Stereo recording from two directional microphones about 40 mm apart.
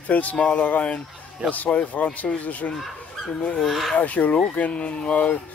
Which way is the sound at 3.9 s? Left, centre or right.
Left.